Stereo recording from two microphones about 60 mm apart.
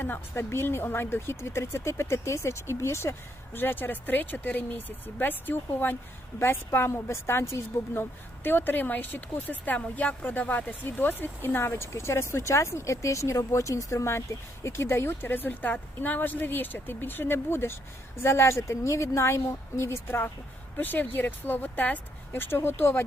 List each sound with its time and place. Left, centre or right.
0.0 s speech: left
3.6 s speech: left
6.7 s speech: left
8.4 s speech: left